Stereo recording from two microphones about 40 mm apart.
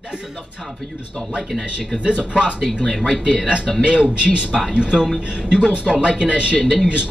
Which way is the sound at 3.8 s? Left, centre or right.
Right.